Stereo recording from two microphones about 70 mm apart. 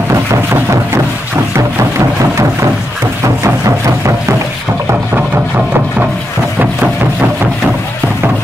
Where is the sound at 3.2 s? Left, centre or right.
Right.